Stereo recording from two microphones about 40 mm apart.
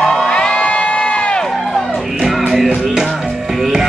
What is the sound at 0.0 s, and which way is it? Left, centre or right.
Crowd, centre.